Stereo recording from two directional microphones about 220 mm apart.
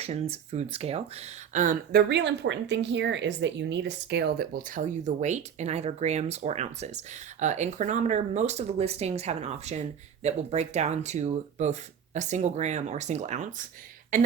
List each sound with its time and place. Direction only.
0.0 s speech: 30° right (ahead or behind)